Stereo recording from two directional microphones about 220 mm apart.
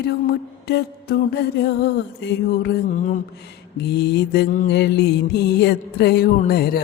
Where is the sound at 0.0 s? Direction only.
45° left (ahead or behind).